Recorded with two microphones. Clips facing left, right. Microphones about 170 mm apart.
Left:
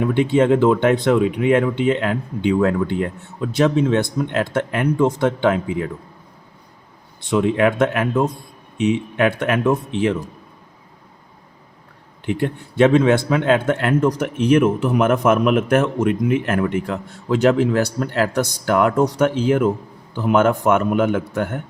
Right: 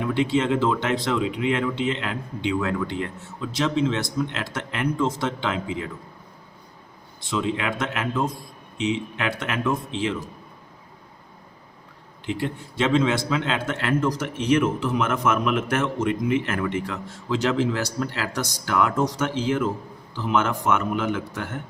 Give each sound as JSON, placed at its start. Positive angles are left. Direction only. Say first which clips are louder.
{"t": 0.0, "sound": "speech", "louder": "left 6 dB", "side_deg": 55}
{"t": 7.3, "sound": "a man's voice", "louder": "left 9 dB", "side_deg": 55}
{"t": 12.2, "sound": "a man's voice", "louder": "left 6 dB", "side_deg": 55}